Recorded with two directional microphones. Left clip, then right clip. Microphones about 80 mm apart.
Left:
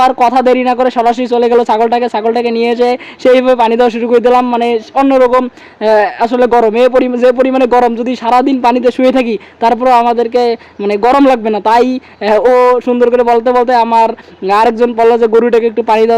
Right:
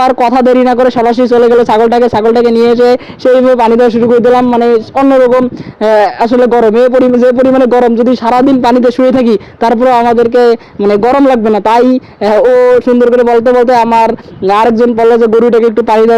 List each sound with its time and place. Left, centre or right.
0.4 s speech: right
1.2 s a man's voice: right
5.0 s a man's voice: centre
5.8 s speech: right
6.7 s a man's voice: right
9.0 s speech: right
11.3 s a man's voice: right
12.3 s a man's voice: centre
14.4 s a man's voice: right
15.9 s speech: right